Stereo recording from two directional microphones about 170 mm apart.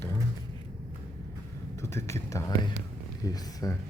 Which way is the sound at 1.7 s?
15° left (ahead or behind).